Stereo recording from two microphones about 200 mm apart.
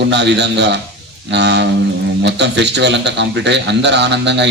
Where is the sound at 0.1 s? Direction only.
60° right (ahead or behind).